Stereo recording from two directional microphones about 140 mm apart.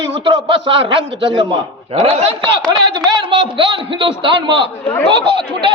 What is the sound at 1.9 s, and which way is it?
Speech, 50° right (ahead or behind).